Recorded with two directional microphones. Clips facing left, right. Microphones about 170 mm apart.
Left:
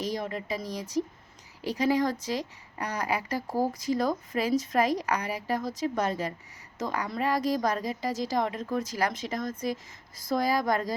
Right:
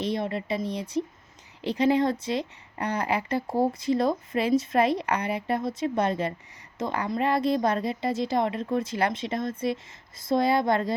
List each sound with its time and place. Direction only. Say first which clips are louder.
0.0 s a woman's voice: right 4 dB; 30° right (ahead or behind)